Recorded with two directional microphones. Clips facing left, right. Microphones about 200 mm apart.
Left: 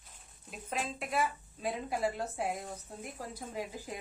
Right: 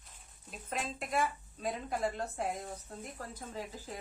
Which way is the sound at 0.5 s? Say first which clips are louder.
Left 1 dB; centre (ahead or behind).